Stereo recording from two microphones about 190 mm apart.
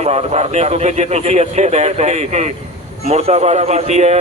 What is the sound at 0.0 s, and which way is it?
A man's voice, 35° right (ahead or behind).